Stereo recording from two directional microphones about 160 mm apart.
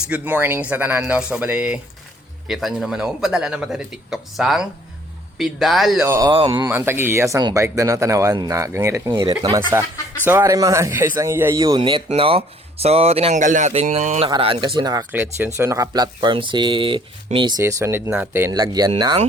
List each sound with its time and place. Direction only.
0.1 s a man's voice: 10° right (ahead or behind)
6.1 s speech: 20° right (ahead or behind)
6.3 s speech: 35° right (ahead or behind)
6.7 s speech: 15° right (ahead or behind); by 14.3 s 45° right (ahead or behind)
14.3 s speech: 30° right (ahead or behind)
15.1 s speech: 10° right (ahead or behind); by 17.5 s 30° right (ahead or behind)
17.6 s speech: 15° right (ahead or behind)
18.6 s speech: 25° right (ahead or behind)